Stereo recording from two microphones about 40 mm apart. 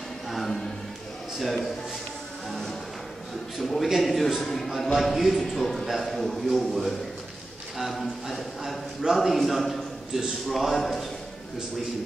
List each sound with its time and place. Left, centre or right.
1.4 s a man's voice: centre
3.5 s a man's voice: centre